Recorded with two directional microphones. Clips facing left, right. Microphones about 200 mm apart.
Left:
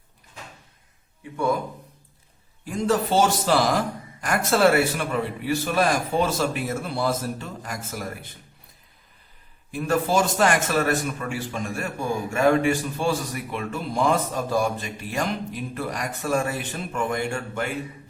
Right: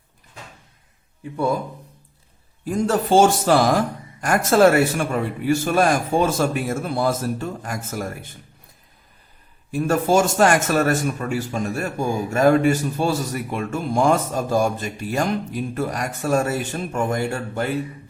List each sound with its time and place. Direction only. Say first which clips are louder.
2.6 s a man's voice: right 3 dB; 45° right (ahead or behind)
9.7 s a man's voice: right 4 dB; 45° right (ahead or behind)